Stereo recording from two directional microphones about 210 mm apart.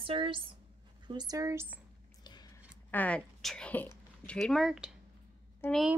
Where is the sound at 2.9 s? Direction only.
5° left (ahead or behind).